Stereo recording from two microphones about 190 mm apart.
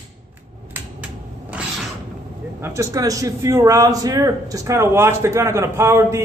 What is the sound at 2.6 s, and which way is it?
A man's voice, 15° right (ahead or behind).